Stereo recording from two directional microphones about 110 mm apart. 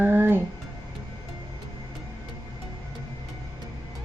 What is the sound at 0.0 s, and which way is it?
Music, 20° right (ahead or behind).